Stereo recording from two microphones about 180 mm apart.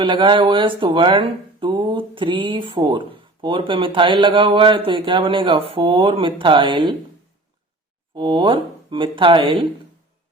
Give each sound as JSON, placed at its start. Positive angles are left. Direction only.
{"t": 0.0, "sound": "speech", "side_deg": -25}
{"t": 8.1, "sound": "speech", "side_deg": -25}